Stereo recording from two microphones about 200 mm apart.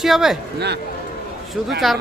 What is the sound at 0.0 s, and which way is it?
Speech, centre (ahead or behind).